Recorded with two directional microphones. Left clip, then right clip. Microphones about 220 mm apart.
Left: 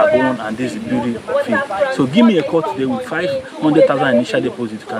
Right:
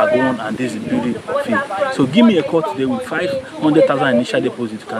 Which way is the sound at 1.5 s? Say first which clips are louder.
Even; 45° left (ahead or behind).